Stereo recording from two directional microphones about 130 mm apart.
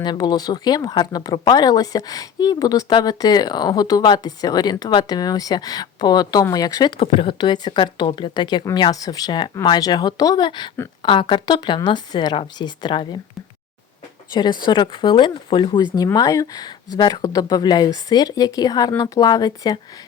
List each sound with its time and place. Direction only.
0.0 s speech: 35° left (ahead or behind)
14.6 s a woman's voice: 35° left (ahead or behind)